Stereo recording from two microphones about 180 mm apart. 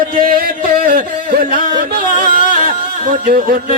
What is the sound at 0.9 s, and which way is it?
Music, 50° right (ahead or behind).